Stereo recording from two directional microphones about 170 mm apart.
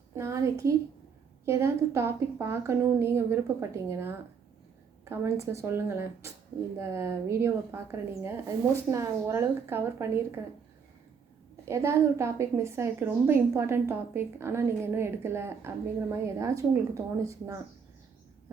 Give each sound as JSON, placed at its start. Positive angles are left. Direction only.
{"t": 0.2, "sound": "a woman's voice", "side_deg": -15}
{"t": 11.6, "sound": "a woman's voice", "side_deg": -15}